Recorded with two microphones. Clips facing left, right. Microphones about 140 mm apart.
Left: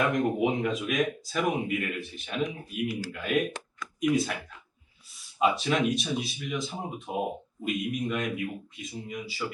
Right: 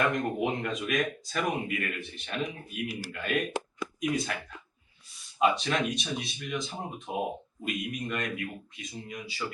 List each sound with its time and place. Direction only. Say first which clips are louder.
0.0 s speech: left 3 dB; 5° left (ahead or behind)
5.4 s speech: left 1 dB; 5° left (ahead or behind)